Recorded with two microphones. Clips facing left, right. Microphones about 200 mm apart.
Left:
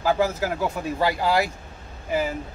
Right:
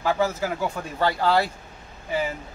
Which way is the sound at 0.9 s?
10° left (ahead or behind).